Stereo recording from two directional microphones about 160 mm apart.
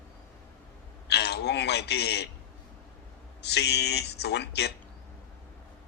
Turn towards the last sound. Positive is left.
turn(degrees=90)